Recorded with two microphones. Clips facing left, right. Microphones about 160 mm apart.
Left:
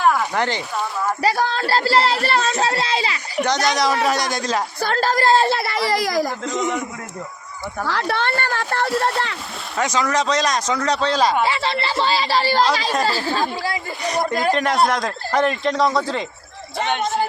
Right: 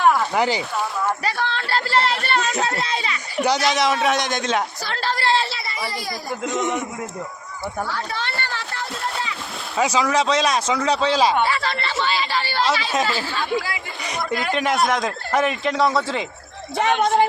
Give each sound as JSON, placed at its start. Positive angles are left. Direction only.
{"t": 0.3, "sound": "speech", "side_deg": -10}
{"t": 1.2, "sound": "speech", "side_deg": 40}
{"t": 3.4, "sound": "a man's voice", "side_deg": -5}
{"t": 4.8, "sound": "a sound", "side_deg": 45}
{"t": 6.4, "sound": "a man's voice", "side_deg": 0}
{"t": 7.9, "sound": "speech", "side_deg": 80}
{"t": 9.7, "sound": "speech", "side_deg": -10}
{"t": 11.4, "sound": "speech", "side_deg": 25}
{"t": 14.5, "sound": "a man's voice", "side_deg": 0}